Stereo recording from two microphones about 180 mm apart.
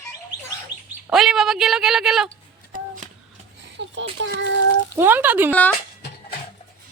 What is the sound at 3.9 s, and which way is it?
Speech, 90° right.